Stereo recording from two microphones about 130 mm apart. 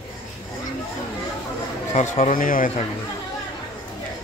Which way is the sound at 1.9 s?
60° left (ahead or behind).